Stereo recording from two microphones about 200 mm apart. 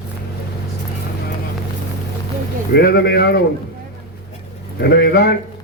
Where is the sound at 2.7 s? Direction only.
55° left (ahead or behind).